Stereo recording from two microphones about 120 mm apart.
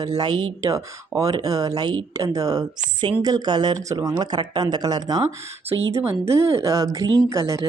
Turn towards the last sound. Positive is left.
turn(degrees=-25)  # may be behind; listen again after turning